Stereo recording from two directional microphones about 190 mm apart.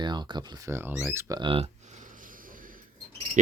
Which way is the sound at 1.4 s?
30° right (ahead or behind).